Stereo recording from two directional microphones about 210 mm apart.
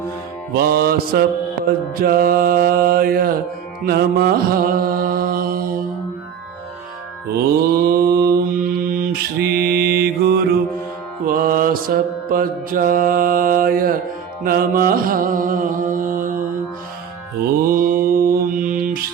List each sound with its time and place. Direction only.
0.5 s mantra: 45° right (ahead or behind)
2.0 s mantra: 45° right (ahead or behind)
7.9 s mantra: 45° right (ahead or behind)
14.4 s music: 45° right (ahead or behind)
17.7 s mantra: 40° right (ahead or behind)